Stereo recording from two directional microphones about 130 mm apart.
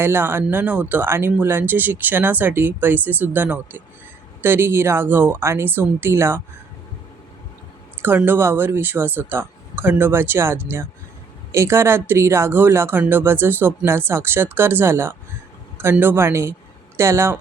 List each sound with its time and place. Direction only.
0.0 s speech: 15° right (ahead or behind)
8.0 s speech: 15° right (ahead or behind)